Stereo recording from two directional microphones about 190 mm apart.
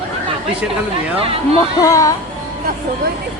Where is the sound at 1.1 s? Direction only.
30° right (ahead or behind).